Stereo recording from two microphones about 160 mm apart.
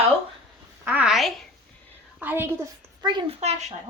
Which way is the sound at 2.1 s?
10° right (ahead or behind).